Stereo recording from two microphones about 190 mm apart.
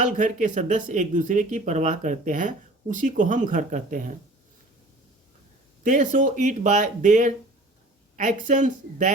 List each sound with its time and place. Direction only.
0.0 s speech: 40° right (ahead or behind)
5.8 s speech: 40° right (ahead or behind)